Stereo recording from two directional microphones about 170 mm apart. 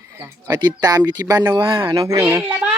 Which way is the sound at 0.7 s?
20° right (ahead or behind).